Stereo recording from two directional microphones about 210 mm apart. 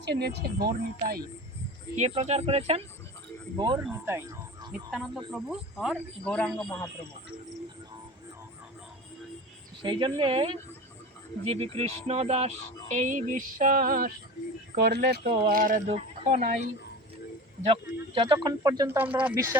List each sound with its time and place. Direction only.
0.0 s speech: 55° right (ahead or behind)
2.0 s speech: 30° right (ahead or behind)
4.0 s music: 15° right (ahead or behind)
4.9 s speech: centre (ahead or behind)
9.8 s speech: 25° right (ahead or behind)
12.9 s a sound: 35° right (ahead or behind)
14.8 s speech: 50° right (ahead or behind)
15.4 s a sound: 40° right (ahead or behind)
15.9 s speech: 30° right (ahead or behind); by 19.5 s 10° right (ahead or behind)